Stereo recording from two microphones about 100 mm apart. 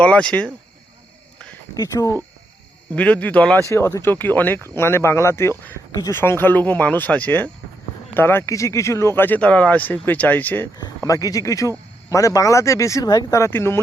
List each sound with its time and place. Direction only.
0.0 s speech: 10° left (ahead or behind)
1.7 s speech: 35° left (ahead or behind)
2.9 s speech: 15° left (ahead or behind)
3.7 s speech: 25° left (ahead or behind)
10.8 s speech: 35° left (ahead or behind)